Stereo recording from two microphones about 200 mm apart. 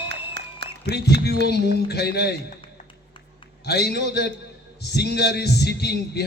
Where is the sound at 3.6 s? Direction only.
55° left (ahead or behind).